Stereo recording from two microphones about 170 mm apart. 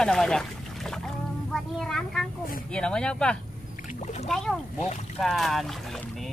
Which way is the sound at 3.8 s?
45° left (ahead or behind).